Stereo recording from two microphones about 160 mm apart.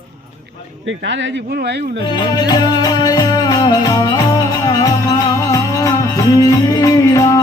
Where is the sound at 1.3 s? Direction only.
90° right.